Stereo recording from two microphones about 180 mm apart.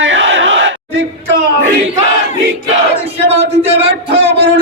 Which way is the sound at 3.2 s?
35° right (ahead or behind).